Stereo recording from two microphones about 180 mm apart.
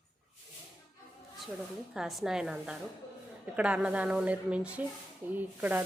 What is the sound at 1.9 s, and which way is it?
A woman's voice, centre (ahead or behind).